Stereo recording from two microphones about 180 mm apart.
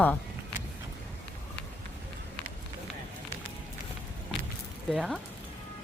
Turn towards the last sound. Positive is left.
turn(degrees=-5)  # may be behind; listen again after turning